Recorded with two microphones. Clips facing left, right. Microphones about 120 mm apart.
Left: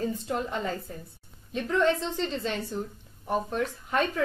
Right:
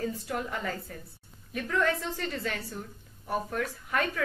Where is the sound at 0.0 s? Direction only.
20° left (ahead or behind).